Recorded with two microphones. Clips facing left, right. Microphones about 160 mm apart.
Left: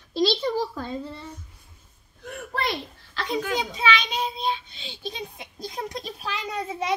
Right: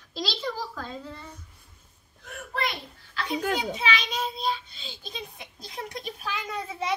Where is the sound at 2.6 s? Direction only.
30° left (ahead or behind).